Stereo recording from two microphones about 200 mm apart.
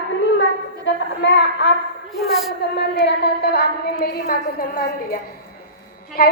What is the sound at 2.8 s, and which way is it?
A woman's voice, 55° left (ahead or behind).